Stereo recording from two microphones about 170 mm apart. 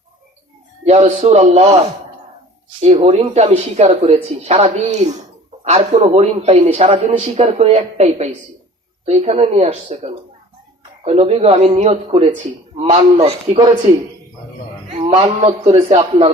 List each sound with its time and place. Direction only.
0.9 s a man's voice: 40° right (ahead or behind)
2.8 s a man's voice: 40° right (ahead or behind)
14.9 s a man's voice: 35° right (ahead or behind)